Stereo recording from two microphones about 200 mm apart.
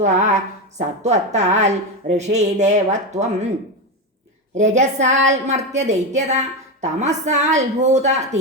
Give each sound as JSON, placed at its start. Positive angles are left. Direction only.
{"t": 0.0, "sound": "speech", "side_deg": -35}
{"t": 4.5, "sound": "speech", "side_deg": -35}